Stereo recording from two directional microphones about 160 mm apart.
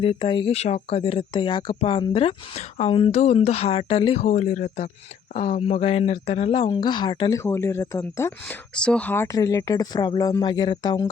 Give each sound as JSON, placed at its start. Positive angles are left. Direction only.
{"t": 0.0, "sound": "speech", "side_deg": 35}
{"t": 8.7, "sound": "speech", "side_deg": 5}